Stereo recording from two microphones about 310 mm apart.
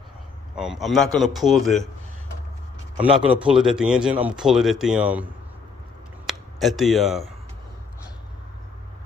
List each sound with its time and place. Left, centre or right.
0.5 s speech: centre
3.0 s speech: centre